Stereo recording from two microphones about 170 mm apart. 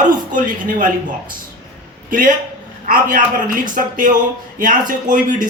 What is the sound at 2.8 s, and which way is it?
Speech, 50° right (ahead or behind).